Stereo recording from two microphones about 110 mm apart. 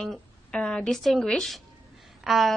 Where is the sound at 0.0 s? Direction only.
5° left (ahead or behind).